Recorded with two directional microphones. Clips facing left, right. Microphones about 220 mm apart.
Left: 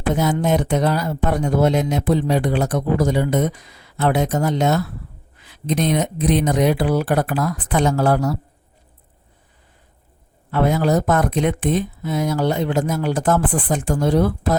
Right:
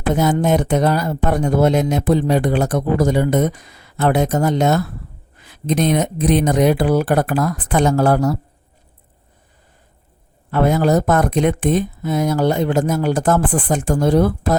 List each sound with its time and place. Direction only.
0.1 s speech: 45° right (ahead or behind)
10.5 s speech: 45° right (ahead or behind)